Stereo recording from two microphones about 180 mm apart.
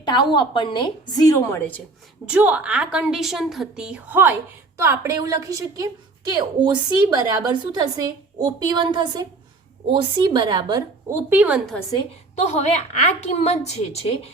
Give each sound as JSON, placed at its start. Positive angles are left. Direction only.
{"t": 0.0, "sound": "a woman's voice", "side_deg": 25}
{"t": 2.2, "sound": "a woman's voice", "side_deg": -5}
{"t": 12.4, "sound": "a woman's voice", "side_deg": 40}